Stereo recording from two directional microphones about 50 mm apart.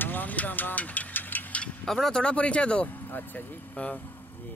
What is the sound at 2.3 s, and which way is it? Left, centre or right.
Speech, left.